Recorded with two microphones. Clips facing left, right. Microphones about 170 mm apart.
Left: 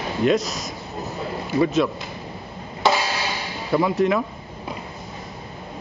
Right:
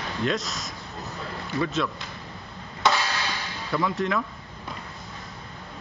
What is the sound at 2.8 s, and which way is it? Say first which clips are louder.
Hammer: left 4 dB; 20° left (ahead or behind).